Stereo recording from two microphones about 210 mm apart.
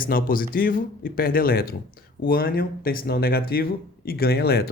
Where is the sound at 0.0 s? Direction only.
40° left (ahead or behind).